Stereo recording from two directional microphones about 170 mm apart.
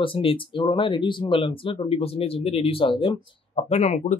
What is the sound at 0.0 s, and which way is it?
Speech, 30° left (ahead or behind).